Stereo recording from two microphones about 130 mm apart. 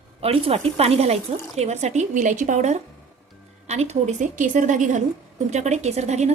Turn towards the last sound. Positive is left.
turn(degrees=-60)  # may be behind; listen again after turning